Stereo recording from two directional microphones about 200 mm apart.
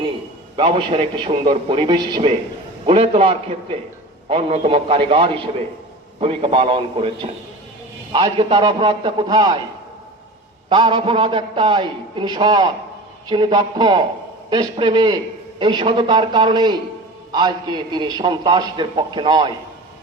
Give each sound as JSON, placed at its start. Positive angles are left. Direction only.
{"t": 0.5, "sound": "a man's voice", "side_deg": -25}
{"t": 10.7, "sound": "a man's voice", "side_deg": -25}